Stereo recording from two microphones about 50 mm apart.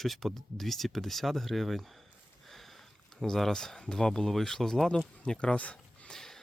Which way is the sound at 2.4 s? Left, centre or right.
Centre.